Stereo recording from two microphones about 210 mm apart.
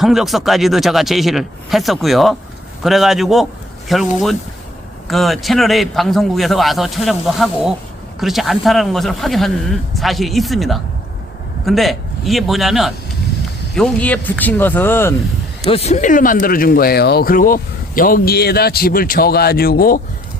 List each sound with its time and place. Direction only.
0.0 s a man's voice: centre (ahead or behind)
15.6 s speech: 30° left (ahead or behind); by 20.0 s 45° left (ahead or behind)